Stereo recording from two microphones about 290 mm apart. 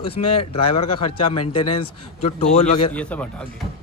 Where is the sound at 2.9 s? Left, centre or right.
Centre.